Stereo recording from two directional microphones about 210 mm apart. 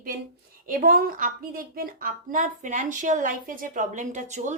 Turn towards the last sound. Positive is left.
turn(degrees=-35)  # may be behind; listen again after turning